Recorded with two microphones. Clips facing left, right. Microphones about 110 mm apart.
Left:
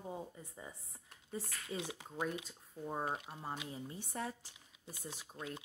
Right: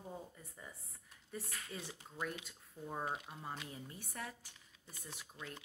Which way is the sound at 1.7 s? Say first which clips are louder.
Left 8 dB; 90° left.